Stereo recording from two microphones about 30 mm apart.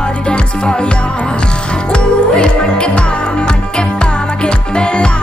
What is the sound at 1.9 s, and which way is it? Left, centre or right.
Music, left.